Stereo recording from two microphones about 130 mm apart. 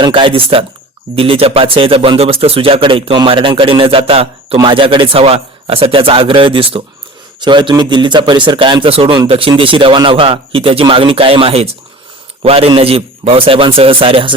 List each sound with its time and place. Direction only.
0.0 s speech: 40° right (ahead or behind)